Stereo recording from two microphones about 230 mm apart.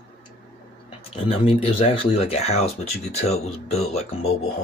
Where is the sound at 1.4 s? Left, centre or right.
Left.